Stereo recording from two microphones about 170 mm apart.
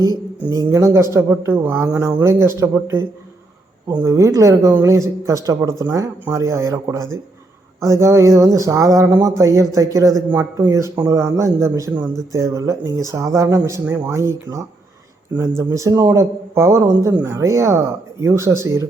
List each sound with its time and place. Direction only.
0.5 s speech: 20° right (ahead or behind)